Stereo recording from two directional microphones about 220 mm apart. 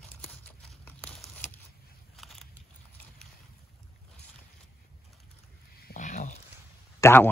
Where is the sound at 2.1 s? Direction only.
Centre (ahead or behind).